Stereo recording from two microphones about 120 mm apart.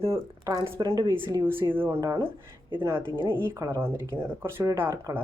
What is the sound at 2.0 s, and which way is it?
Speech, 30° right (ahead or behind).